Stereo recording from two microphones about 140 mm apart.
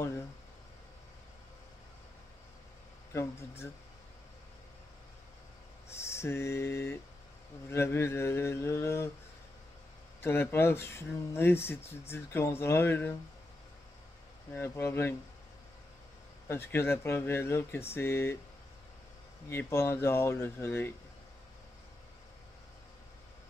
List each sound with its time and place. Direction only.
3.1 s speech: 20° left (ahead or behind)
6.0 s a sound: 20° left (ahead or behind)
7.7 s speech: 20° left (ahead or behind)
10.2 s speech: 15° left (ahead or behind)
14.5 s speech: 20° left (ahead or behind)
16.4 s speech: 15° left (ahead or behind)
19.5 s speech: 20° left (ahead or behind)